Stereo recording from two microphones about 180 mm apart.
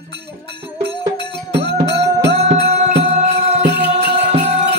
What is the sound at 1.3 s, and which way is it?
Music, 70° right (ahead or behind).